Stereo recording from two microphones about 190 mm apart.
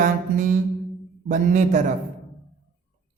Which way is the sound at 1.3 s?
40° right (ahead or behind).